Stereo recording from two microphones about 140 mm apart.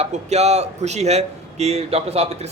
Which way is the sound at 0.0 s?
50° right (ahead or behind).